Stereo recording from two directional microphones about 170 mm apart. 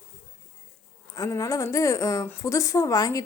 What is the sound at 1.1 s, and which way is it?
Speech, 20° left (ahead or behind).